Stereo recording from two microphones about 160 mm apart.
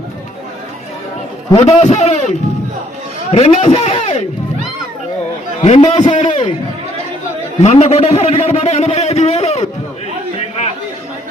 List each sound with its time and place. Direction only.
1.5 s a man's voice: 45° left (ahead or behind)
3.3 s a man's voice: 40° left (ahead or behind)
5.5 s a man's voice: 45° left (ahead or behind)
5.8 s a man's voice: 30° left (ahead or behind)
6.1 s a sound: 45° left (ahead or behind)
7.6 s a man's voice: 45° left (ahead or behind)